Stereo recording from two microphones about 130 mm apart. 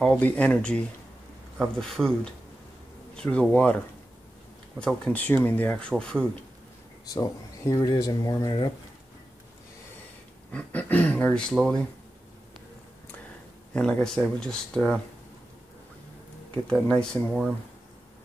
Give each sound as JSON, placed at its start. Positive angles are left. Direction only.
{"t": 0.0, "sound": "speech", "side_deg": 10}
{"t": 4.7, "sound": "speech", "side_deg": 5}
{"t": 7.1, "sound": "speech", "side_deg": 30}
{"t": 10.5, "sound": "speech", "side_deg": 10}
{"t": 13.7, "sound": "speech", "side_deg": 5}
{"t": 16.6, "sound": "speech", "side_deg": 5}